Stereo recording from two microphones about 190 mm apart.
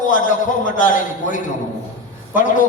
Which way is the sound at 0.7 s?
45° left (ahead or behind).